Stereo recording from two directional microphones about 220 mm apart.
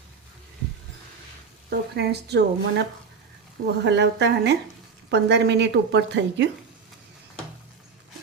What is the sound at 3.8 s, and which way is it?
Speech, 50° right (ahead or behind).